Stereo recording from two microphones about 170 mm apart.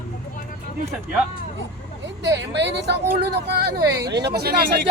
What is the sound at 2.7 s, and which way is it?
Speech, 75° right (ahead or behind).